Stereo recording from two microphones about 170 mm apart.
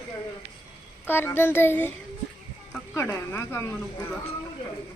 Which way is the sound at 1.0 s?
10° left (ahead or behind).